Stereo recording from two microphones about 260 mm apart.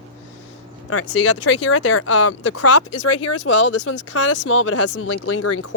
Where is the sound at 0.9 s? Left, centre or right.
Left.